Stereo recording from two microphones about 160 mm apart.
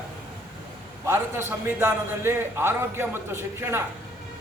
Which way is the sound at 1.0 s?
15° right (ahead or behind).